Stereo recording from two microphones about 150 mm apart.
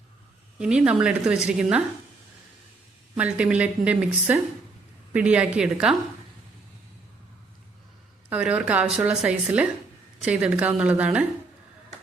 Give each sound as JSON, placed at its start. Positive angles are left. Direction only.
{"t": 0.6, "sound": "speech", "side_deg": -5}
{"t": 3.2, "sound": "a woman's voice", "side_deg": -10}
{"t": 8.3, "sound": "a woman's voice", "side_deg": -10}